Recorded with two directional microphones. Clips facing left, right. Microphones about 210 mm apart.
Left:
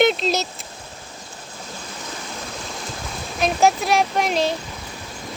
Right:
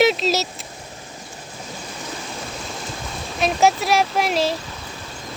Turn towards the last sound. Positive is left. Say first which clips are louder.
# even
turn(degrees=0)  # may be behind; listen again after turning